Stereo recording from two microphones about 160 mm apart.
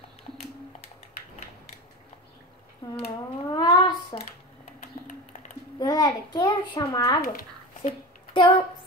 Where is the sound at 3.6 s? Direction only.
25° left (ahead or behind).